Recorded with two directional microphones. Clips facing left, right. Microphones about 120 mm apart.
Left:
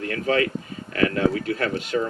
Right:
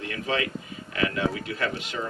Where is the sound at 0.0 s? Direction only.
45° left (ahead or behind).